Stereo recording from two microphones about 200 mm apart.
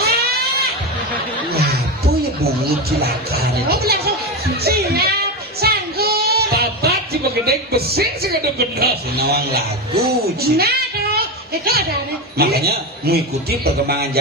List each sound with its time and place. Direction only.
0.0 s music: 50° right (ahead or behind)
1.5 s speech: 50° right (ahead or behind)
4.6 s child singing: 50° right (ahead or behind)
12.4 s a man's voice: 50° right (ahead or behind)